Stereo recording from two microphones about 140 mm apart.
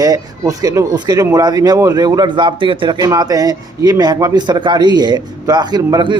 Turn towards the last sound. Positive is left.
turn(degrees=-30)  # may be behind; listen again after turning